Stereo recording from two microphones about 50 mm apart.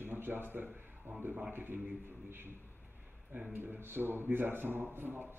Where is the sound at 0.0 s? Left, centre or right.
Right.